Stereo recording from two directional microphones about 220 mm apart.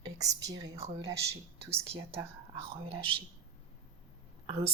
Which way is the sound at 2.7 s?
25° right (ahead or behind).